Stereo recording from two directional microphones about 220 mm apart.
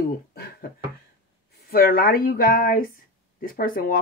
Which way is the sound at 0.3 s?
45° left (ahead or behind).